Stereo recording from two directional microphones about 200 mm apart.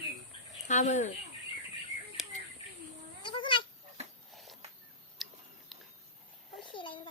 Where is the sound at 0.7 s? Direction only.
35° left (ahead or behind).